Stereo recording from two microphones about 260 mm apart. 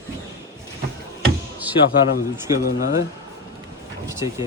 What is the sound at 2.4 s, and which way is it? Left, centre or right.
Speech, centre.